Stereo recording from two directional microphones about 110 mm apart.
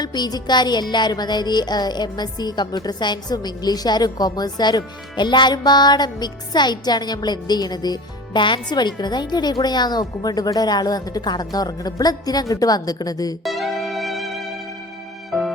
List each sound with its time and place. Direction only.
0.0 s music: 40° left (ahead or behind)
13.4 s music: centre (ahead or behind)